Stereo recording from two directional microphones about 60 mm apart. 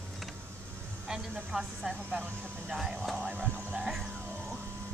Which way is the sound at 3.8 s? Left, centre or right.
Centre.